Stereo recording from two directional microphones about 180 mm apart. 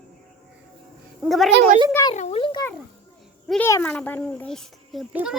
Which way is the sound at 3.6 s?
10° left (ahead or behind).